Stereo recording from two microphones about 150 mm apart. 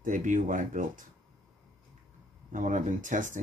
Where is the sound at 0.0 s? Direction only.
60° right (ahead or behind).